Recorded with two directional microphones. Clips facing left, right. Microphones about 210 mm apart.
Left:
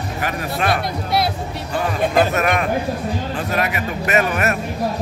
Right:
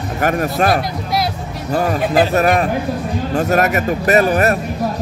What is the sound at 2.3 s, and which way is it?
Speech, 35° right (ahead or behind).